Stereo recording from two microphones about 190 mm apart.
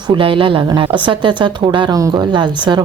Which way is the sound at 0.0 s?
25° right (ahead or behind).